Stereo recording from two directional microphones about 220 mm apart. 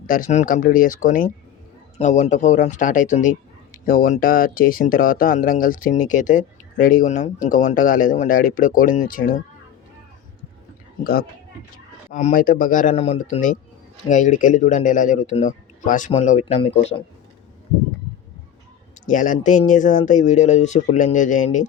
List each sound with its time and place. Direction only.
0.1 s speech: 35° left (ahead or behind)
11.0 s speech: 40° left (ahead or behind); by 17.0 s 25° left (ahead or behind)
19.0 s speech: 35° left (ahead or behind)